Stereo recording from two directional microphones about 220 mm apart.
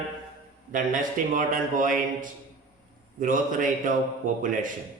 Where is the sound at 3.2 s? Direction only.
35° right (ahead or behind).